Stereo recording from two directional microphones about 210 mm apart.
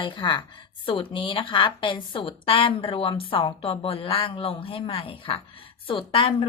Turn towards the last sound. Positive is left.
turn(degrees=25)  # may be behind; listen again after turning